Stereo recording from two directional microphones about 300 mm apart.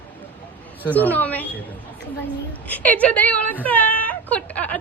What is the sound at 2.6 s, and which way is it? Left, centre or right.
A woman's voice, centre.